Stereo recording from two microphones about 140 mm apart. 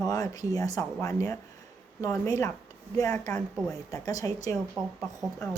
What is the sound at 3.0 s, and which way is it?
A man's voice, 25° left (ahead or behind).